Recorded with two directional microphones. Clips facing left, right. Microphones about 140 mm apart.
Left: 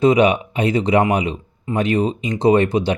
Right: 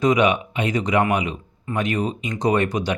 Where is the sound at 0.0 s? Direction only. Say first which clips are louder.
Left 4 dB; 30° left (ahead or behind).